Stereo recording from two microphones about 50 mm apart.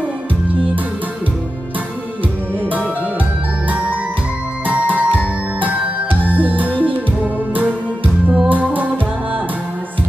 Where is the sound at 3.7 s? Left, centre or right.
Right.